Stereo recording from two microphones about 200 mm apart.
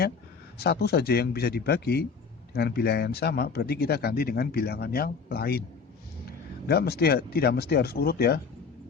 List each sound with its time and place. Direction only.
0.6 s speech: 55° left (ahead or behind)
6.7 s speech: 50° left (ahead or behind)